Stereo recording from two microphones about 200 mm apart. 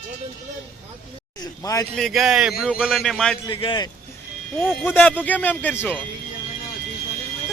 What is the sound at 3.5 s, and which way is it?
Speech, 25° left (ahead or behind).